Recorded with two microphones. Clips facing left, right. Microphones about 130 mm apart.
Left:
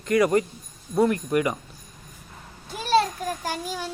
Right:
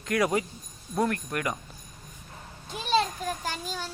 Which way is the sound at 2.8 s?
5° left (ahead or behind).